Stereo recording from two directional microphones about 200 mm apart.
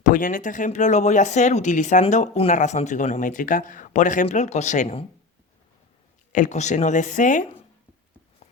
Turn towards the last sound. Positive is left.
turn(degrees=40)  # may be behind; listen again after turning